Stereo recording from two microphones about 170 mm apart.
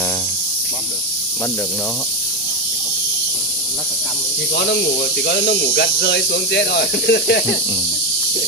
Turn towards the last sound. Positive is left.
turn(degrees=70)  # may be behind; listen again after turning